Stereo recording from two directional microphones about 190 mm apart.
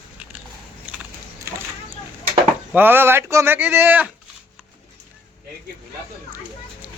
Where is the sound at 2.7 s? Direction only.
10° right (ahead or behind).